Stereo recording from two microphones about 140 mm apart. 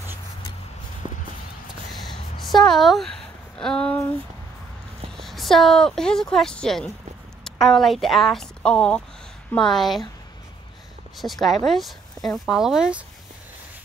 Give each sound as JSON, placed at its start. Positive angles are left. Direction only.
{"t": 1.0, "sound": "walk", "side_deg": -35}
{"t": 2.0, "sound": "a sound", "side_deg": 0}
{"t": 5.1, "sound": "speech", "side_deg": 0}
{"t": 11.1, "sound": "speech", "side_deg": 0}